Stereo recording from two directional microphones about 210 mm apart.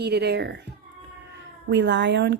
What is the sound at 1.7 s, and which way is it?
Speech, 60° right (ahead or behind).